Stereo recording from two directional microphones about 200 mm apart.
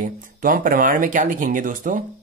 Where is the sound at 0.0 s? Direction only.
45° right (ahead or behind).